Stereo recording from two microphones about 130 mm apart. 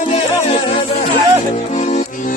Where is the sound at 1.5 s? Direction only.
55° left (ahead or behind).